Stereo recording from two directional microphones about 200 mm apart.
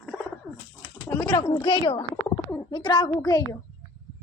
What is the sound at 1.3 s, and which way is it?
Speech, 20° left (ahead or behind).